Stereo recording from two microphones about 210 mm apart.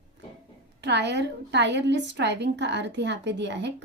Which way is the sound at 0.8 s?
55° right (ahead or behind).